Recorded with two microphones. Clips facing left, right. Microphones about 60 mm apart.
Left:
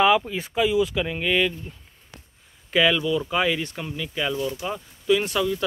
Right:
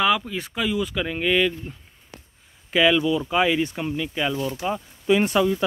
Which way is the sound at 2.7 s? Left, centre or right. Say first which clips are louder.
Right 2 dB; centre.